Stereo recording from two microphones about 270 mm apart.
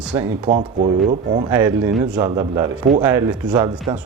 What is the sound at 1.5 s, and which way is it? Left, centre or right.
Speech, centre.